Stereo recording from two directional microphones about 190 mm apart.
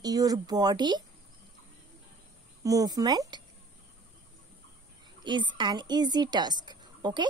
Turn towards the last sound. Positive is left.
turn(degrees=-25)  # may be behind; listen again after turning